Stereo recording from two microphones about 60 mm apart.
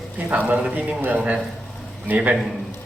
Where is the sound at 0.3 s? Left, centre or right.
Right.